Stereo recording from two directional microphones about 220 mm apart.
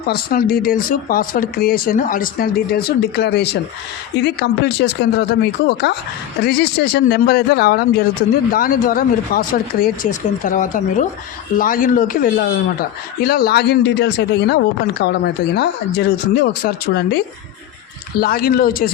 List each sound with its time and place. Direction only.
0.1 s speech: 40° left (ahead or behind)